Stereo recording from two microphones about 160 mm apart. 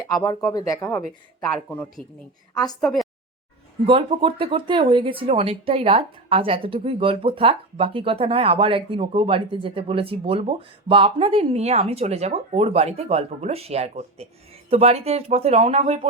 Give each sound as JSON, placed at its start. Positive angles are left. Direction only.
{"t": 0.2, "sound": "speech", "side_deg": 20}
{"t": 1.4, "sound": "speech", "side_deg": 5}
{"t": 3.8, "sound": "speech", "side_deg": -35}